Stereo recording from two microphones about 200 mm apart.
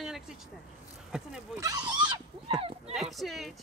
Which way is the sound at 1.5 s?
15° right (ahead or behind).